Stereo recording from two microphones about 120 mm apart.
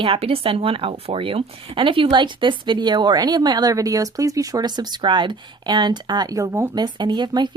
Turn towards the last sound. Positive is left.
turn(degrees=-40)  # may be behind; listen again after turning